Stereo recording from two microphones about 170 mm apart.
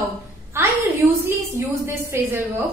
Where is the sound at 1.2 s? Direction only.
15° right (ahead or behind).